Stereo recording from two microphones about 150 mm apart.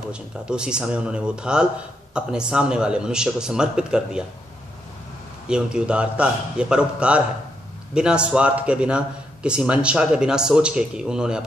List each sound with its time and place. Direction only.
0.1 s a man's voice: 5° right (ahead or behind)
5.5 s a man's voice: 5° right (ahead or behind)